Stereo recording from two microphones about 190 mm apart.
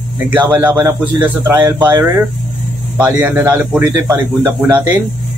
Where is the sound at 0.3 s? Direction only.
10° right (ahead or behind).